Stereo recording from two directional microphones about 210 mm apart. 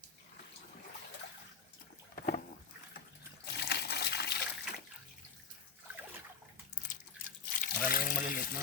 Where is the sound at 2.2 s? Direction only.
40° left (ahead or behind).